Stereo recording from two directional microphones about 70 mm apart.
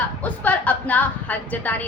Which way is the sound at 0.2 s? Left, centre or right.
Left.